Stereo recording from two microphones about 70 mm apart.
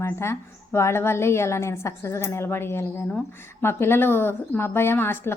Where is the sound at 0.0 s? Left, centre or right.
Left.